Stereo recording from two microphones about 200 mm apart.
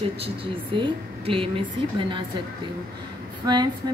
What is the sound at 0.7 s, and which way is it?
Speech, 25° right (ahead or behind).